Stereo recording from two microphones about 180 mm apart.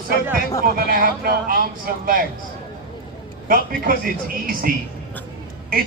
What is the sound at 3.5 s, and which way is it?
Speech, 50° right (ahead or behind).